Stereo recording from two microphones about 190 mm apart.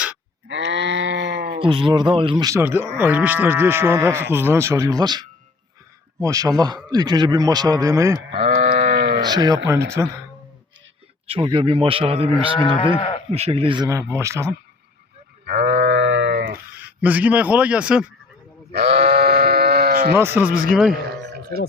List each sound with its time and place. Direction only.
0.4 s sheep: 75° right (ahead or behind)
1.5 s a man's voice: 25° right (ahead or behind)
8.4 s sheep: 45° right (ahead or behind)
9.2 s a man's voice: 20° right (ahead or behind)
11.3 s a man's voice: 25° right (ahead or behind)
12.8 s speech: 25° left (ahead or behind)
13.3 s speech: 30° right (ahead or behind); by 14.5 s 15° right (ahead or behind)
15.4 s sheep: 50° right (ahead or behind); by 16.4 s 70° right (ahead or behind)
16.8 s speech: 10° right (ahead or behind)
18.7 s sheep: 60° right (ahead or behind)
20.1 s speech: 10° right (ahead or behind)